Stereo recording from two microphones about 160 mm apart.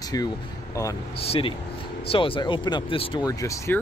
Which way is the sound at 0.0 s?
25° left (ahead or behind).